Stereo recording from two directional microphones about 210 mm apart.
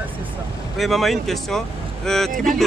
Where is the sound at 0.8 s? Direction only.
Centre (ahead or behind).